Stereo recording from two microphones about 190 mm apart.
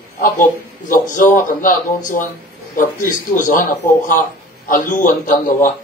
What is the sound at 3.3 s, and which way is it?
Speech, 45° left (ahead or behind).